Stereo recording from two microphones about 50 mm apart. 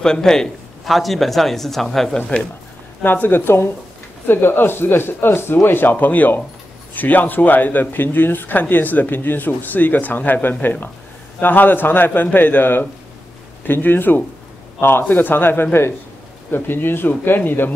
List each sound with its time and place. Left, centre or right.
0.0 s a man's voice: centre
0.8 s speech: centre
2.1 s speech: left
3.0 s speech: left